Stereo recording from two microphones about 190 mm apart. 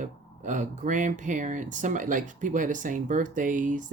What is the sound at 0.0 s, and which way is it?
Speech, 40° right (ahead or behind).